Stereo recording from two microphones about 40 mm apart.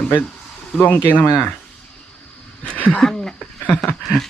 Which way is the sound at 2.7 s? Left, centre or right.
Left.